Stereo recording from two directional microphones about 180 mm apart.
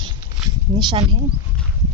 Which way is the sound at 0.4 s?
Centre (ahead or behind).